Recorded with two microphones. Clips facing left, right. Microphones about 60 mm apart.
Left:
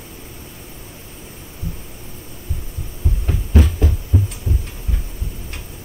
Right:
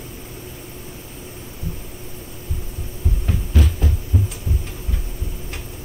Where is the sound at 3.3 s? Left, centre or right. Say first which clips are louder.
Left 4 dB; left.